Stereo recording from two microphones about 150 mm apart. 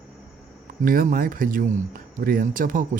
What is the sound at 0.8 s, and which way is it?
A man's voice, 70° right (ahead or behind).